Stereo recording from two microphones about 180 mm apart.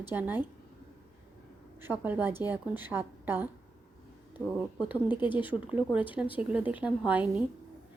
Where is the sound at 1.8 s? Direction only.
10° right (ahead or behind).